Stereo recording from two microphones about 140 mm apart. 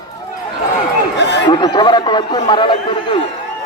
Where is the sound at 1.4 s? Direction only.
30° left (ahead or behind).